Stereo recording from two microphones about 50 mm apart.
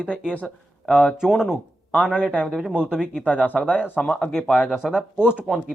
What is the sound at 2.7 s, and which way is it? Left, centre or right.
Speech, right.